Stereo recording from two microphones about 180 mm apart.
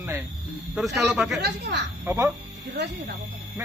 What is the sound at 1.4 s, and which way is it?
Speech, 70° right (ahead or behind).